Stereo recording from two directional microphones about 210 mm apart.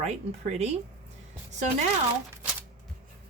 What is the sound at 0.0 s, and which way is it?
Speech, 30° right (ahead or behind).